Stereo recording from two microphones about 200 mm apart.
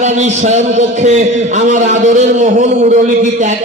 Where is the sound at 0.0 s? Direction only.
35° right (ahead or behind).